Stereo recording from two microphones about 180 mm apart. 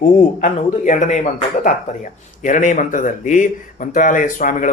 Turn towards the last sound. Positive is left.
turn(degrees=45)  # may be behind; listen again after turning